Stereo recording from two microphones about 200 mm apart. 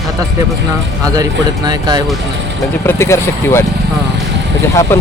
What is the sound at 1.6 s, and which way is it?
Speech, 20° right (ahead or behind).